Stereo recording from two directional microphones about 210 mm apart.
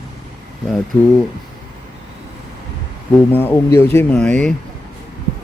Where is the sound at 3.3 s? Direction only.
10° left (ahead or behind).